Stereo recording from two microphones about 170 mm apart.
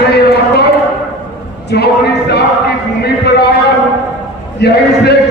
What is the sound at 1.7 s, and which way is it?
Speech, 70° left (ahead or behind).